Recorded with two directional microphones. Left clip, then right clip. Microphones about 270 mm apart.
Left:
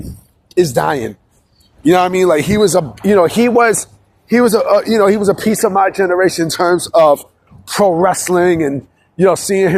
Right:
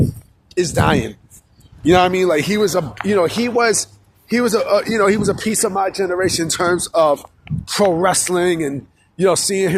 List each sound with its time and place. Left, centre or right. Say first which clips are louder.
0.4 s speech: left 4 dB; left
7.7 s speech: left 4 dB; centre